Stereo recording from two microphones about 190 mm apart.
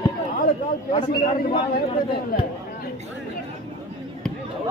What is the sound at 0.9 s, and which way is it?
Speech, 30° left (ahead or behind).